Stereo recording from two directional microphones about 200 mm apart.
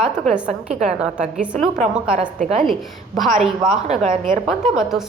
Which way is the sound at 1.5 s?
35° right (ahead or behind).